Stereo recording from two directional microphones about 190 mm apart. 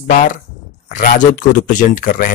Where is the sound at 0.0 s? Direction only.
45° left (ahead or behind).